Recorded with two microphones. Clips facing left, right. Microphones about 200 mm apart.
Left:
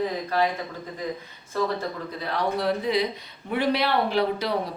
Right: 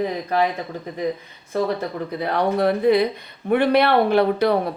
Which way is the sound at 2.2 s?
60° right (ahead or behind).